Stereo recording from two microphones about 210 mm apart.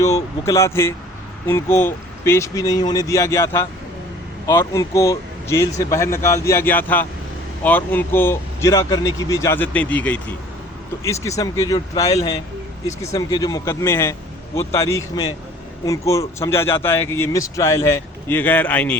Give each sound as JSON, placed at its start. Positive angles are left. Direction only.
{"t": 0.0, "sound": "speech", "side_deg": 15}